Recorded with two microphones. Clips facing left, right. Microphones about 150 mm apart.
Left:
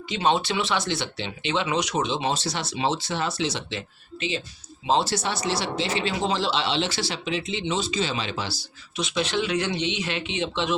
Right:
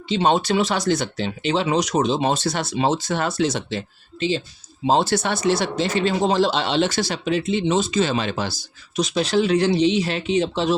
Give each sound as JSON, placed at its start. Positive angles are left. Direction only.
{"t": 0.3, "sound": "speech", "side_deg": -45}
{"t": 4.9, "sound": "speech", "side_deg": -55}